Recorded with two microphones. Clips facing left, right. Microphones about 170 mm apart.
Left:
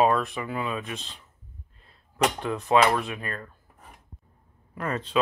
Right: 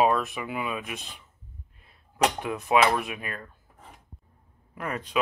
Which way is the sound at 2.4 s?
15° right (ahead or behind).